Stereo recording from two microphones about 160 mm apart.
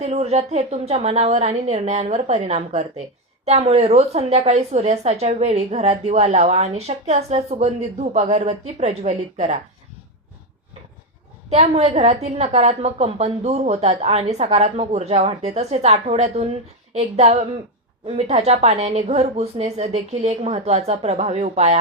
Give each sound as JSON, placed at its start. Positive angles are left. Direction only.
{"t": 0.0, "sound": "a woman's voice", "side_deg": -40}
{"t": 11.4, "sound": "a woman's voice", "side_deg": -45}